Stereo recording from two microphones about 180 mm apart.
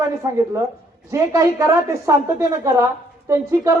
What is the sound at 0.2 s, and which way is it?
A man's voice, 15° right (ahead or behind).